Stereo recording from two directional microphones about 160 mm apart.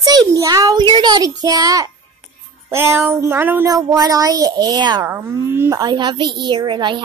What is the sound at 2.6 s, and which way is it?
Child singing, 15° right (ahead or behind).